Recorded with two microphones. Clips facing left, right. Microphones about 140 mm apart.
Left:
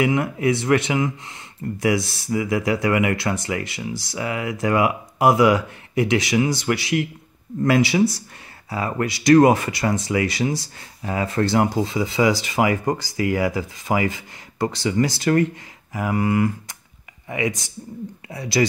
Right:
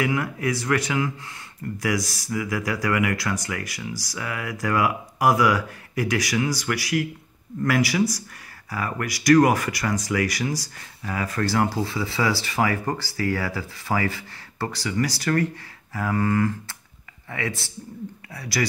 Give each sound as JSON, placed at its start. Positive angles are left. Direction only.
{"t": 0.0, "sound": "speech", "side_deg": 20}